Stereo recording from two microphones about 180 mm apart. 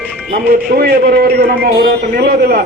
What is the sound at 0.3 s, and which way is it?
A man's voice, 55° right (ahead or behind).